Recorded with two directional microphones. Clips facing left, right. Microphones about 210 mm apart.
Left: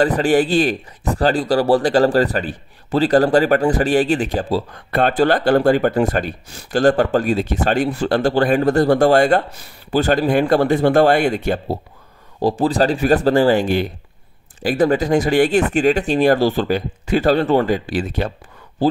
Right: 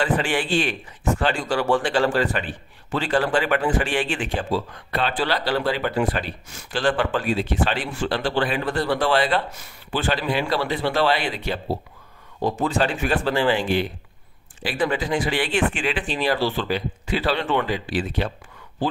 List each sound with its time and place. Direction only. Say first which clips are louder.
0.0 s speech: left 8 dB; 40° left (ahead or behind)
4.9 s speech: left 8 dB; 50° left (ahead or behind)
9.5 s speech: left 7 dB; 35° left (ahead or behind)
12.4 s speech: left 6 dB; 35° left (ahead or behind)